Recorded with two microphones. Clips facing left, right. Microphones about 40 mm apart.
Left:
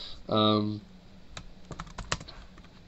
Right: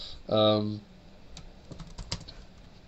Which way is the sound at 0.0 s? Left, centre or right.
Centre.